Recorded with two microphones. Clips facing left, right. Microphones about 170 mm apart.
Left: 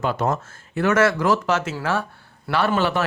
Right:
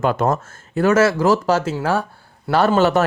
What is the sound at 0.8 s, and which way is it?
Speech, 30° right (ahead or behind).